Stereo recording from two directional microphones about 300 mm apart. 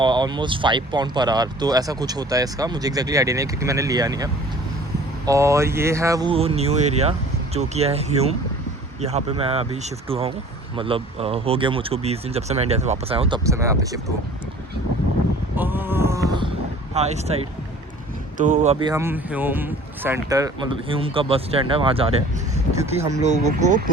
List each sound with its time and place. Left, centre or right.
0.0 s speech: centre
15.5 s a sound: centre
16.9 s speech: right
23.2 s speech: right